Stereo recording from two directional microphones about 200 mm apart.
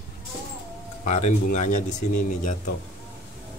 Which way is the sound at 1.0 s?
35° left (ahead or behind).